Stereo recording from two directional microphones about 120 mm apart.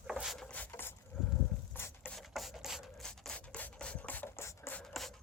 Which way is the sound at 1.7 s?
15° left (ahead or behind).